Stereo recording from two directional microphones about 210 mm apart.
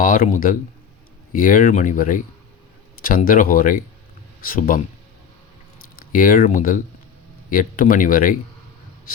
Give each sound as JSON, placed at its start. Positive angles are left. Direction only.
{"t": 0.0, "sound": "speech", "side_deg": 40}
{"t": 6.0, "sound": "speech", "side_deg": 40}